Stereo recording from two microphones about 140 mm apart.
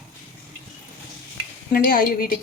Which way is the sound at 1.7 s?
90° left.